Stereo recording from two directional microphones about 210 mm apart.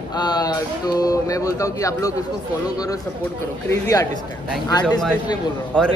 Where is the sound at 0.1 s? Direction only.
20° left (ahead or behind).